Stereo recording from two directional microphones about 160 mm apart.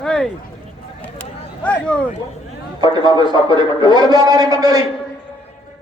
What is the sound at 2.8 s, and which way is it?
A man's voice, 30° right (ahead or behind).